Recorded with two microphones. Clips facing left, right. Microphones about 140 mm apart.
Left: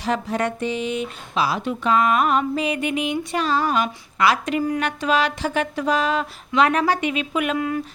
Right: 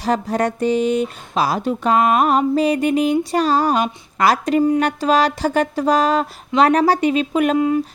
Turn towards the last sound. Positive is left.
turn(degrees=-25)  # may be behind; listen again after turning